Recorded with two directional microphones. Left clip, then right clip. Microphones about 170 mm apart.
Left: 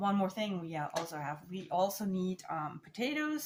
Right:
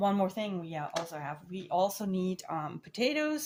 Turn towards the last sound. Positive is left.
turn(degrees=-50)  # may be behind; listen again after turning